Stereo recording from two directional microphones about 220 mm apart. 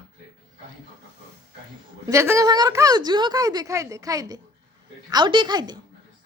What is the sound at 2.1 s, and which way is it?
A woman's voice, 15° right (ahead or behind).